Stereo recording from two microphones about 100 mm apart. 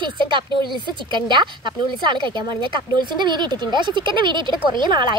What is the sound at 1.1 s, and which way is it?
Speech, 50° right (ahead or behind).